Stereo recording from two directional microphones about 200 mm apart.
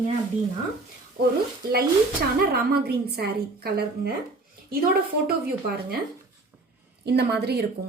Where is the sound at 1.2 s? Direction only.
45° right (ahead or behind).